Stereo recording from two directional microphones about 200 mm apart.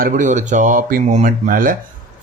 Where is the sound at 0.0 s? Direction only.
40° right (ahead or behind).